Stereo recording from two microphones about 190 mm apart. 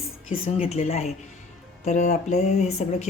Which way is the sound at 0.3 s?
30° left (ahead or behind).